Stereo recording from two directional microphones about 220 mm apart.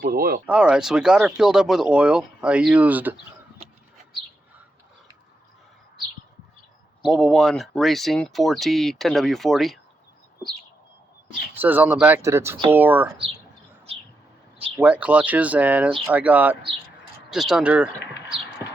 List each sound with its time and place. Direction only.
0.0 s speech: 40° right (ahead or behind)
0.4 s speech: 5° right (ahead or behind)
7.0 s speech: centre (ahead or behind)
11.5 s speech: 10° right (ahead or behind)
14.8 s speech: 5° right (ahead or behind)